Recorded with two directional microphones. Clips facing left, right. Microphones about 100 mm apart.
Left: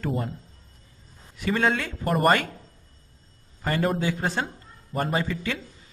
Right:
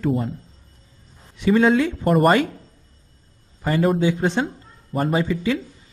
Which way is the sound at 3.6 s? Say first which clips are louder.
Right 6 dB; 5° right (ahead or behind).